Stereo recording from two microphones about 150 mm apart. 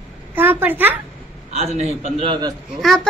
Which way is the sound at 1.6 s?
45° right (ahead or behind).